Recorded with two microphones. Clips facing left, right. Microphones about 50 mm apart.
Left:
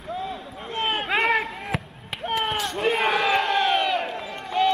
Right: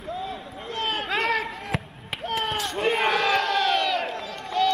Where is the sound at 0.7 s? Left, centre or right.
Centre.